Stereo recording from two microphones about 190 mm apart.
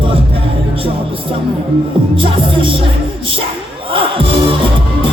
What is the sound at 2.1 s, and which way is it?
Music, 25° right (ahead or behind).